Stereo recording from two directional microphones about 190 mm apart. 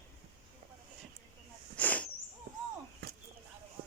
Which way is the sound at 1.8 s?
10° left (ahead or behind).